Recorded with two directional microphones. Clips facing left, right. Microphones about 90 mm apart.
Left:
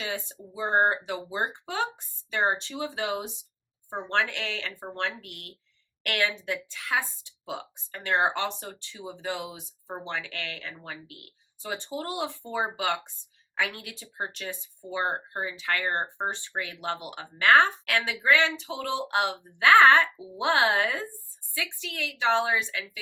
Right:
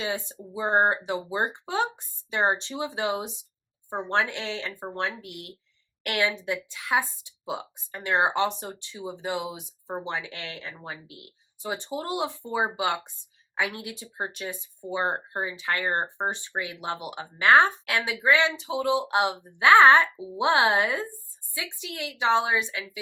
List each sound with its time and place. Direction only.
0.0 s a woman's voice: 20° right (ahead or behind)